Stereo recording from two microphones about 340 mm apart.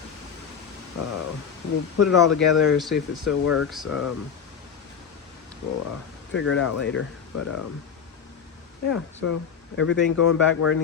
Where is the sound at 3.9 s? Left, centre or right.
Left.